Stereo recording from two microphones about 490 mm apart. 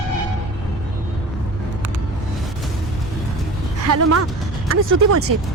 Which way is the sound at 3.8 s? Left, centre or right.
Right.